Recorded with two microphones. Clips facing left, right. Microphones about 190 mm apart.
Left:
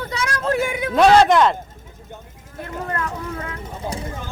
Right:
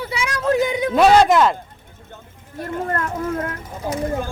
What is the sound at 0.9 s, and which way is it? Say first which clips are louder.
Speech: even; 5° right (ahead or behind).